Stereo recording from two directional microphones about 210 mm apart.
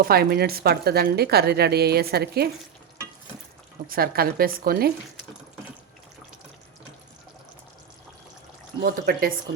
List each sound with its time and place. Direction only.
0.0 s speech: 45° right (ahead or behind)
3.8 s speech: 45° right (ahead or behind)
8.8 s speech: 45° right (ahead or behind)